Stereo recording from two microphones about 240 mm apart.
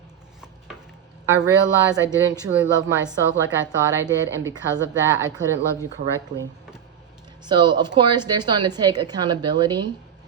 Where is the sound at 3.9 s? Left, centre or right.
Centre.